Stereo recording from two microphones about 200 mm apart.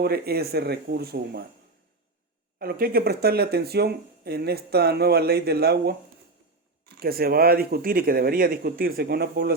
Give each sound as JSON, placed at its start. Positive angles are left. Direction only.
{"t": 0.0, "sound": "speech", "side_deg": -50}
{"t": 2.6, "sound": "speech", "side_deg": -50}
{"t": 7.0, "sound": "speech", "side_deg": -50}